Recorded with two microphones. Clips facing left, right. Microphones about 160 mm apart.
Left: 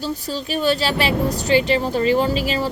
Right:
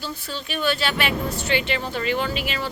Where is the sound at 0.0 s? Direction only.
40° left (ahead or behind).